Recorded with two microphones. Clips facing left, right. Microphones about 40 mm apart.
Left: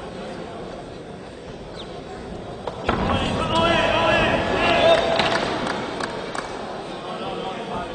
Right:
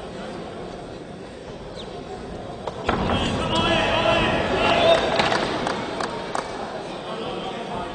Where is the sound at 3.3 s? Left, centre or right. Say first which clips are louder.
Left 1 dB; centre.